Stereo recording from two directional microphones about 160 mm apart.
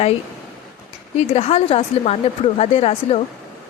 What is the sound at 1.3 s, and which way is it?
A woman's voice, 40° left (ahead or behind).